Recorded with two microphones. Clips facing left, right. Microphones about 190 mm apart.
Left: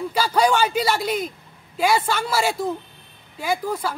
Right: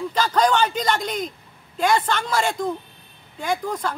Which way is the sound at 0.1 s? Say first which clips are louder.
Even; 10° left (ahead or behind).